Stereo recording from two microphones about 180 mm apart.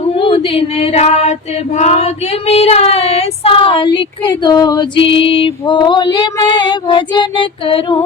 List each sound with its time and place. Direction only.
0.2 s female singing: 30° left (ahead or behind)